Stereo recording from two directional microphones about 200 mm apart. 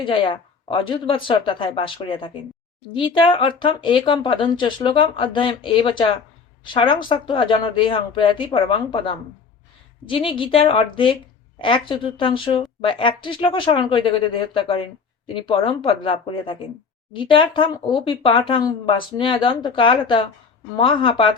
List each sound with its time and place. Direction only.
0.0 s speech: 25° left (ahead or behind)